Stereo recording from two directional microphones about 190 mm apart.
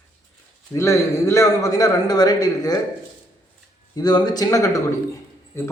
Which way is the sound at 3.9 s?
20° left (ahead or behind).